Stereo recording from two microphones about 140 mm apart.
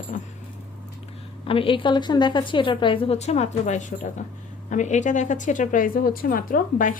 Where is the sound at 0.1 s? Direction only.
60° left (ahead or behind).